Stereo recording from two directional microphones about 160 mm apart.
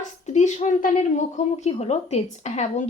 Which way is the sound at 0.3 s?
50° left (ahead or behind).